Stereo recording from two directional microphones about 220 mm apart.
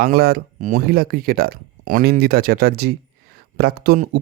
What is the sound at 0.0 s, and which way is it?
A man's voice, 45° right (ahead or behind).